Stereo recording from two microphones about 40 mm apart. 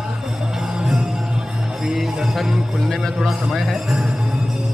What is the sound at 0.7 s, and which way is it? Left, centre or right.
Music, centre.